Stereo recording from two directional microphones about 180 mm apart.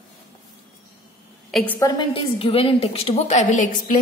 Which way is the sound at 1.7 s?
20° left (ahead or behind).